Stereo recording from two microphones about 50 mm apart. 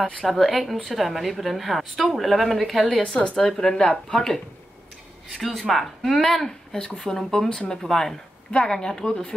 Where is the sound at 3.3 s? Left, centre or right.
Centre.